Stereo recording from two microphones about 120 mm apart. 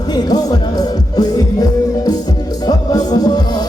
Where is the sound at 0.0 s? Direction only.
35° left (ahead or behind).